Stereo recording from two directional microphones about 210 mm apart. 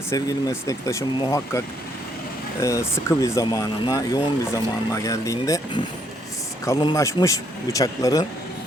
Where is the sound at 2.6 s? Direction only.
15° left (ahead or behind).